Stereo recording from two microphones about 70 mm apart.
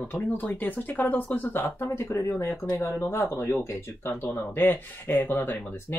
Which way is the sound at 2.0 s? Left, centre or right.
Left.